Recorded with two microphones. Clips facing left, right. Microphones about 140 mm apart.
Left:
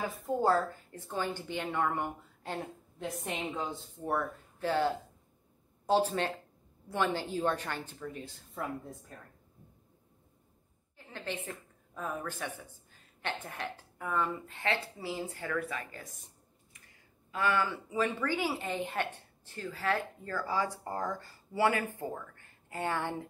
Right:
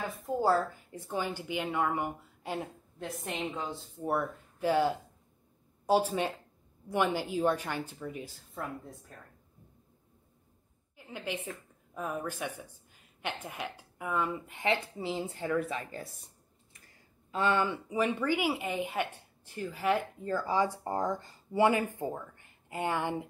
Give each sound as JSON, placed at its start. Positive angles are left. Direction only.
{"t": 0.0, "sound": "speech", "side_deg": 0}
{"t": 8.4, "sound": "a woman's voice", "side_deg": 0}
{"t": 11.0, "sound": "a woman's voice", "side_deg": -10}
{"t": 17.3, "sound": "speech", "side_deg": -25}